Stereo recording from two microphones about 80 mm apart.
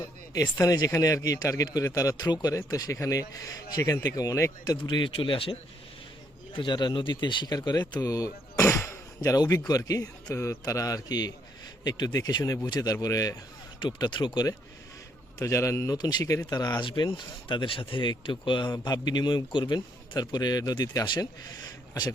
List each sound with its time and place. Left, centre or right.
0.6 s speech: left
2.1 s speech: left
4.9 s speech: left
6.5 s speech: left
7.5 s speech: left
10.3 s speech: left
13.8 s speech: left
15.4 s a man's voice: left
16.0 s speech: left
16.2 s speech: left
16.8 s speech: left
18.7 s speech: left
19.5 s speech: left
20.1 s speech: left